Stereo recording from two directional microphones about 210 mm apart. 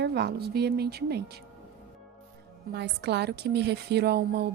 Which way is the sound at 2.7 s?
55° right (ahead or behind).